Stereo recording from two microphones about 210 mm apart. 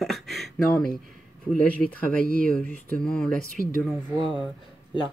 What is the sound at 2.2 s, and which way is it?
Speech, 40° right (ahead or behind).